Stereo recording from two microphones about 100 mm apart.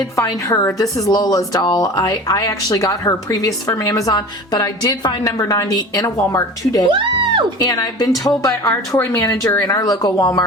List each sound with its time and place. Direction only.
0.2 s speech: 35° left (ahead or behind)
6.9 s music: 55° right (ahead or behind)
7.6 s speech: 40° left (ahead or behind)